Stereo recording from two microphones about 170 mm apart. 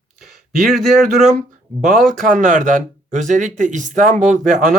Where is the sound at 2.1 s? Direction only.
50° right (ahead or behind).